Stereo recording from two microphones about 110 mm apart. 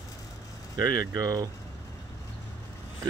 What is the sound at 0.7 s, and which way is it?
Speech, 35° right (ahead or behind).